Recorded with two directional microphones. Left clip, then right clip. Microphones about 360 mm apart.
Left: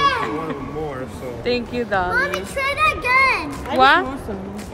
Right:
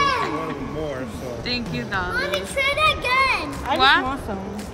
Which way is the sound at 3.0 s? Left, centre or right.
Centre.